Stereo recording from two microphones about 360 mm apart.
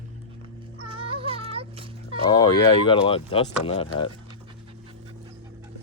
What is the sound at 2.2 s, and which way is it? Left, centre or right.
Speech, centre.